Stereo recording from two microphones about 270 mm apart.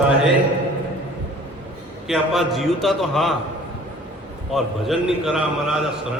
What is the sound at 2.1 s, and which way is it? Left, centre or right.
A man's voice, centre.